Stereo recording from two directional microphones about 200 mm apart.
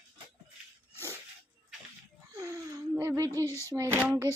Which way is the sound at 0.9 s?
15° right (ahead or behind).